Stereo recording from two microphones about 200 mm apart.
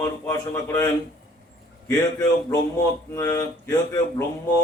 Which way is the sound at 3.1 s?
15° left (ahead or behind).